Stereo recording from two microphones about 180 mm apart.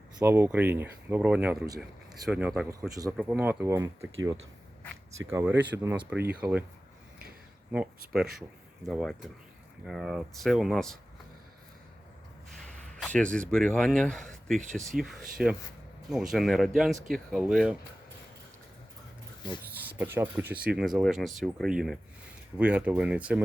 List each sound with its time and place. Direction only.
0.2 s speech: 15° right (ahead or behind)
2.9 s speech: 20° right (ahead or behind)
3.2 s speech: 10° right (ahead or behind)
5.3 s speech: 10° right (ahead or behind)
7.7 s speech: 5° right (ahead or behind)
13.0 s speech: 5° left (ahead or behind)
19.9 s speech: 10° right (ahead or behind)